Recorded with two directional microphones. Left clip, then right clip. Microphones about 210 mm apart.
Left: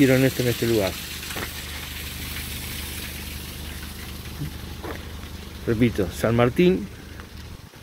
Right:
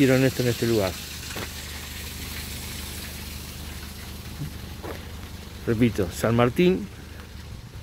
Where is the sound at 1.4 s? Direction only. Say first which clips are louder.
Left 3 dB; 35° left (ahead or behind).